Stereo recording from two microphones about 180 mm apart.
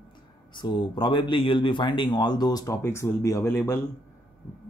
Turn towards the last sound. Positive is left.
turn(degrees=15)  # may be behind; listen again after turning